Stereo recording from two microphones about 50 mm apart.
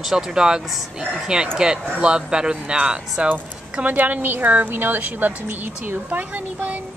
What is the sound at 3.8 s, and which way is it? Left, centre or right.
A woman's voice, right.